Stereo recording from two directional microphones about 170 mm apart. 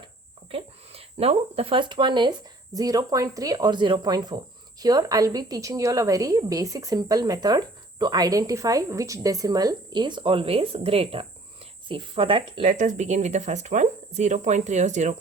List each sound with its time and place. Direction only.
0.5 s a woman's voice: 35° right (ahead or behind)
12.6 s speech: 45° right (ahead or behind)